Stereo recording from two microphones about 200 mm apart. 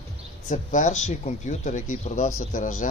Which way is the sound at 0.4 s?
40° left (ahead or behind).